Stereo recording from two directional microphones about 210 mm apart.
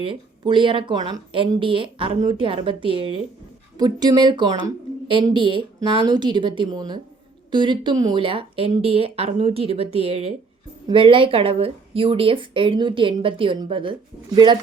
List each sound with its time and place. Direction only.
0.0 s speech: 25° right (ahead or behind)